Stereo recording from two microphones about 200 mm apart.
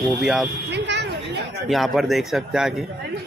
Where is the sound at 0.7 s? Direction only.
60° right (ahead or behind).